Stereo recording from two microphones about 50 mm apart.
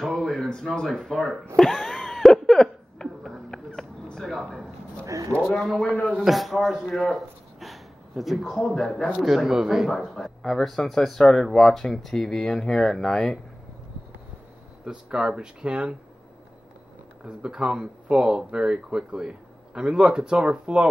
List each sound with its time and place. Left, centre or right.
0.1 s a sound: centre
5.0 s a sound: right
5.5 s speech: centre
8.5 s speech: centre
9.5 s speech: centre
14.9 s speech: centre
17.2 s speech: centre